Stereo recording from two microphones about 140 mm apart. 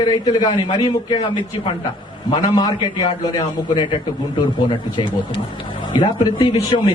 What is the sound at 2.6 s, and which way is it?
A man's voice, 30° left (ahead or behind).